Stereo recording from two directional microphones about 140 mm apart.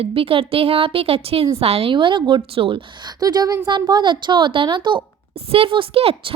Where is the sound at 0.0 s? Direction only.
40° right (ahead or behind).